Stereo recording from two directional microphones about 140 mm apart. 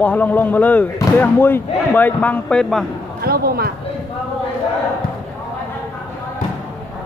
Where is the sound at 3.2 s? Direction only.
90° right.